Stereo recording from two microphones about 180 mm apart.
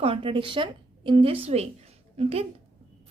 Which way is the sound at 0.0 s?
30° right (ahead or behind).